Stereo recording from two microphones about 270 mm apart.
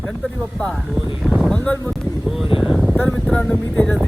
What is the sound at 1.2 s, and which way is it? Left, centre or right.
Speech, centre.